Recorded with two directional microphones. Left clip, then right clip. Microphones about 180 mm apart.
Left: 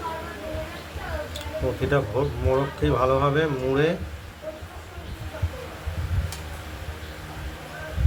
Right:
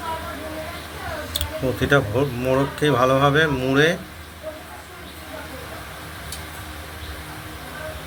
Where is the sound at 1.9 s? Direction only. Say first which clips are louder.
Right 6 dB; 25° right (ahead or behind).